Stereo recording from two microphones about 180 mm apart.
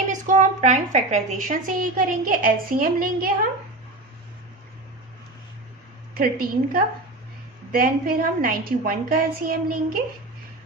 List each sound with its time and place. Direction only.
0.1 s a woman's voice: 45° right (ahead or behind)
6.1 s a woman's voice: 55° right (ahead or behind)